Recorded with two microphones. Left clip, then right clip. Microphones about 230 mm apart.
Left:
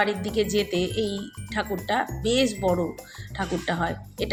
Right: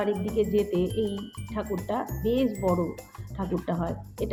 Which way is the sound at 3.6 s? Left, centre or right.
Centre.